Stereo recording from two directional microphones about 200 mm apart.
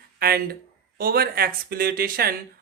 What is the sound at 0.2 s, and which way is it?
Speech, 50° right (ahead or behind).